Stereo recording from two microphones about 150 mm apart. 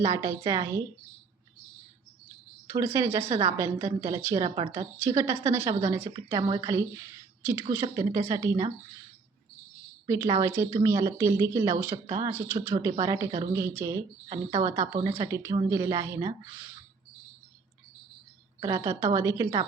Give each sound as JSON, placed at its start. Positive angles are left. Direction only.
{"t": 0.0, "sound": "speech", "side_deg": -20}
{"t": 2.7, "sound": "a woman's voice", "side_deg": -20}
{"t": 10.4, "sound": "a woman's voice", "side_deg": -20}
{"t": 18.6, "sound": "speech", "side_deg": -20}